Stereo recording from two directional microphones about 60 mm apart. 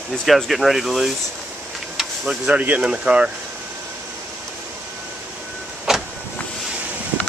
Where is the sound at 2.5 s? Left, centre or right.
Right.